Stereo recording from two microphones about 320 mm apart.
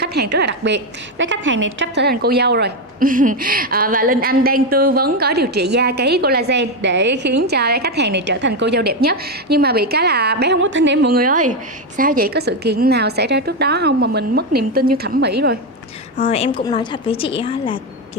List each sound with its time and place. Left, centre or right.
0.0 s a woman's voice: right
16.2 s a woman's voice: centre